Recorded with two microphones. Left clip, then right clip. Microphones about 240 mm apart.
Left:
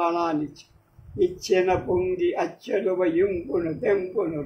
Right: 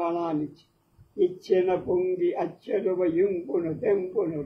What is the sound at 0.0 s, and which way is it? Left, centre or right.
Speech, left.